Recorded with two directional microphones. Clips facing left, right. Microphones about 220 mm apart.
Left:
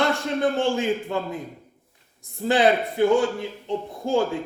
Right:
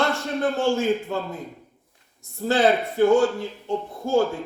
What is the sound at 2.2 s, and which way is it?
A man's voice, 15° left (ahead or behind).